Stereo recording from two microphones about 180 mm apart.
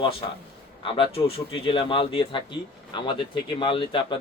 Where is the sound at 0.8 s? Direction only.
30° left (ahead or behind).